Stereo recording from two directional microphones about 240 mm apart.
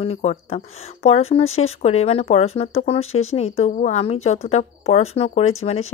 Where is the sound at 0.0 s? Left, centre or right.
Left.